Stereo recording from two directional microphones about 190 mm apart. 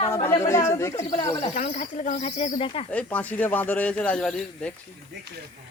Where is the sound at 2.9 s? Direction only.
10° left (ahead or behind).